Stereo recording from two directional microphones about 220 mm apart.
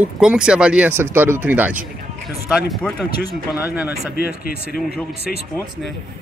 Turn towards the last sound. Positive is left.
turn(degrees=45)  # may be behind; listen again after turning